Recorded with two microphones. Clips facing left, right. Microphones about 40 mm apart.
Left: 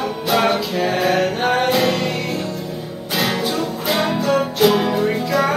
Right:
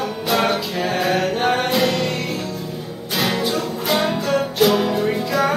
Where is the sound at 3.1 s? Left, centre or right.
Centre.